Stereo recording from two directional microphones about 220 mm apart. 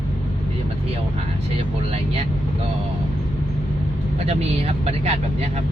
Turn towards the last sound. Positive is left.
turn(degrees=-30)  # may be behind; listen again after turning